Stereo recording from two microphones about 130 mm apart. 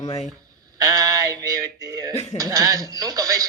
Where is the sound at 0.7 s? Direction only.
25° right (ahead or behind).